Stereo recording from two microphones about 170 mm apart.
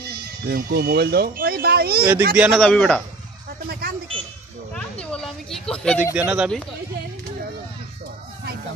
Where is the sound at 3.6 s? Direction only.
65° right (ahead or behind).